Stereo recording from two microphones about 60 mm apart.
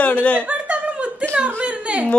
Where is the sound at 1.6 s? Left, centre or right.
Right.